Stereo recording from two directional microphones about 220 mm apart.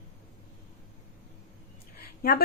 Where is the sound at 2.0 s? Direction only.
45° left (ahead or behind).